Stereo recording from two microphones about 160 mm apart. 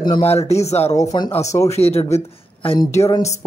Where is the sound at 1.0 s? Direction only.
25° left (ahead or behind).